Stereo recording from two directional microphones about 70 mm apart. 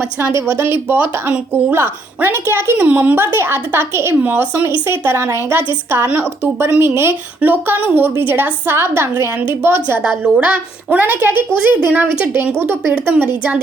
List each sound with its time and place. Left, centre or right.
0.5 s a woman's voice: right
2.7 s a woman's voice: right
7.4 s a woman's voice: right
10.0 s a woman's voice: centre
10.4 s a woman's voice: right